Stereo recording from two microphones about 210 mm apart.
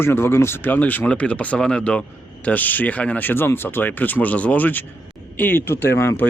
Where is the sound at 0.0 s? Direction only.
10° left (ahead or behind).